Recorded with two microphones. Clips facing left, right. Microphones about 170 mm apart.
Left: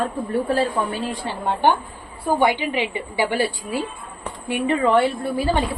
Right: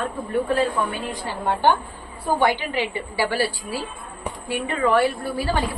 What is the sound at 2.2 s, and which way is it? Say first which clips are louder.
A woman's voice: left 2 dB; 20° left (ahead or behind).